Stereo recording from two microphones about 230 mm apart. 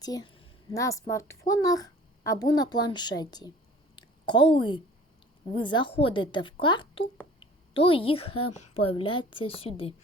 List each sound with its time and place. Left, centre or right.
0.0 s speech: centre
3.9 s a sound: left
5.5 s a woman's voice: left
8.3 s speech: left
8.7 s a woman's voice: left